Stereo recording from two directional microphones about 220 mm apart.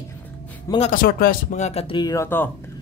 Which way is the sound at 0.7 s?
25° left (ahead or behind).